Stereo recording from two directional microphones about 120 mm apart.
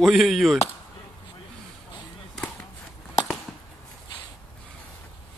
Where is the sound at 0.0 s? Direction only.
Centre (ahead or behind).